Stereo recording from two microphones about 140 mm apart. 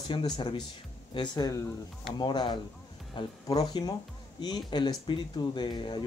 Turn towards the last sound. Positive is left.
turn(degrees=35)  # may be behind; listen again after turning